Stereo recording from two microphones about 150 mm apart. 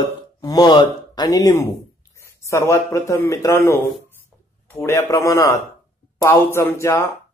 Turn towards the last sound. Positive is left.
turn(degrees=20)  # may be behind; listen again after turning